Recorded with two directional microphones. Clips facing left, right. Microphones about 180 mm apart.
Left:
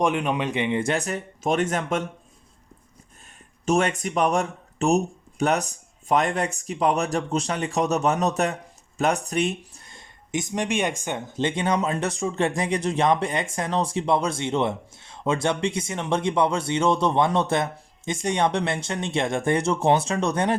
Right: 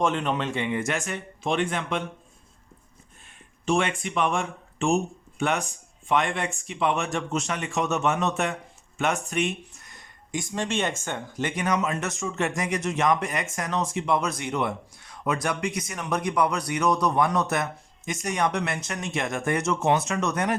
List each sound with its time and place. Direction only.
0.0 s speech: 10° left (ahead or behind); by 2.0 s 45° left (ahead or behind)
3.3 s speech: 40° left (ahead or behind)